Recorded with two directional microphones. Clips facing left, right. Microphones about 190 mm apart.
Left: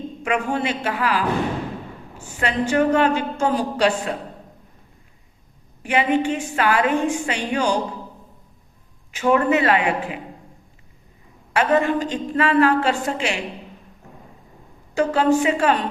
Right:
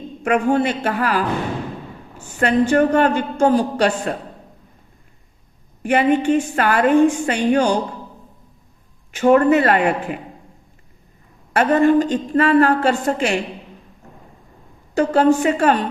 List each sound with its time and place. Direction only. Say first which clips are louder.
0.3 s a woman's voice: right 6 dB; 50° right (ahead or behind)
2.4 s a woman's voice: right 4 dB; 50° right (ahead or behind)
5.8 s a woman's voice: right 4 dB; 50° right (ahead or behind)
9.1 s a woman's voice: right 5 dB; 50° right (ahead or behind)
11.5 s a woman's voice: right 5 dB; 50° right (ahead or behind)
14.9 s a woman's voice: right 3 dB; 50° right (ahead or behind)